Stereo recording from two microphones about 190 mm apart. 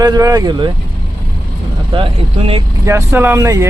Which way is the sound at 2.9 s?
15° right (ahead or behind).